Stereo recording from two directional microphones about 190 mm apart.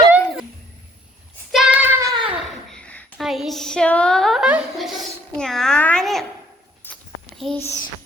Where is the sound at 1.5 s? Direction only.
5° right (ahead or behind).